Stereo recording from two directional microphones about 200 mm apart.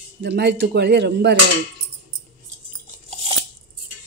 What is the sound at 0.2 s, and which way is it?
Speech, 55° right (ahead or behind).